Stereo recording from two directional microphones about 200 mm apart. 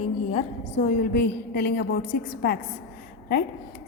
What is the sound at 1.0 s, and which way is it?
A woman's voice, 50° left (ahead or behind).